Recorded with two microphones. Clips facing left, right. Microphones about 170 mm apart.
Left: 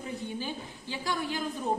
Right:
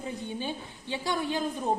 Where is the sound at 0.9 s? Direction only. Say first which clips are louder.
Right 3 dB; 25° right (ahead or behind).